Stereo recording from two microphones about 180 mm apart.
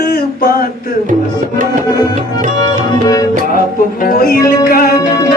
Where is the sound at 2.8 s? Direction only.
20° left (ahead or behind).